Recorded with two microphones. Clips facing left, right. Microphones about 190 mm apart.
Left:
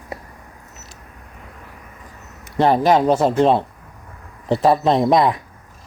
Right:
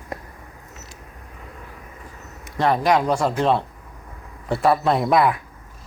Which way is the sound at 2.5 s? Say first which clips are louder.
Left 4 dB; 30° left (ahead or behind).